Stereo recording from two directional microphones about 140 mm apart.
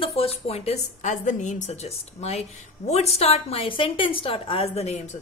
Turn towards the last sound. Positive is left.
turn(degrees=50)  # may be behind; listen again after turning